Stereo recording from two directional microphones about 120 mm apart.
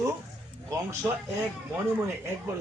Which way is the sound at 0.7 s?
25° right (ahead or behind).